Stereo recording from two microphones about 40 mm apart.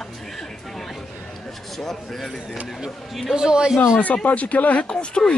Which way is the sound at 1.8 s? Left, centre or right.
Centre.